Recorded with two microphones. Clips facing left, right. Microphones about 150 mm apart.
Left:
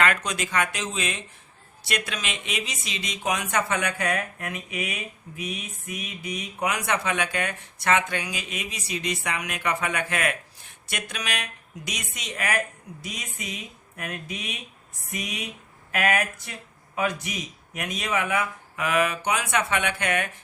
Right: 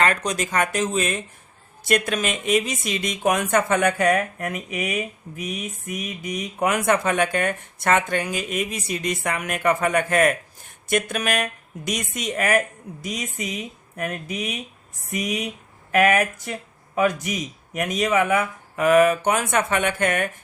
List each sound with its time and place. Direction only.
0.0 s speech: 35° right (ahead or behind)